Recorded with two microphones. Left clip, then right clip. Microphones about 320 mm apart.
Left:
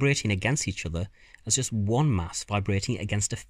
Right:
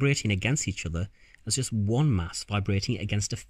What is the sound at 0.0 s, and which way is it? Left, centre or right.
Speech, centre.